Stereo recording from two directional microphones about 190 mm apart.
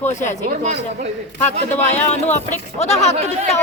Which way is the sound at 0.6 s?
40° right (ahead or behind).